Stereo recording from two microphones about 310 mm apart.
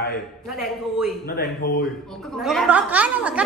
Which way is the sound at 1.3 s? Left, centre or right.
Left.